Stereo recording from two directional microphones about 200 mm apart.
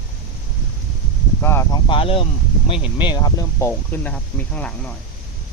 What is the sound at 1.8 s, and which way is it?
Speech, 25° left (ahead or behind).